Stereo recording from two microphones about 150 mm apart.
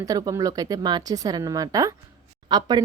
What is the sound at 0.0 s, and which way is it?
Speech, 25° right (ahead or behind).